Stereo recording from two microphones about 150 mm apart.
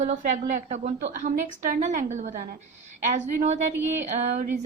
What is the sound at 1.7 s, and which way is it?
A woman's voice, 65° right (ahead or behind).